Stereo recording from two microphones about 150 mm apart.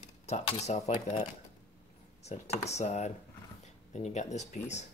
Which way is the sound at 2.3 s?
45° left (ahead or behind).